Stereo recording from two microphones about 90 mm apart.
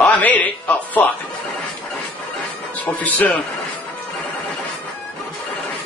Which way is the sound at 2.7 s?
20° left (ahead or behind).